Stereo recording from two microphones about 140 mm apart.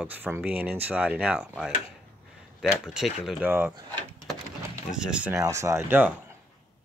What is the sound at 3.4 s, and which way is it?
Speech, 15° right (ahead or behind).